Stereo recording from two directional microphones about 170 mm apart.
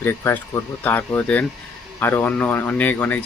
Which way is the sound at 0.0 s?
15° left (ahead or behind).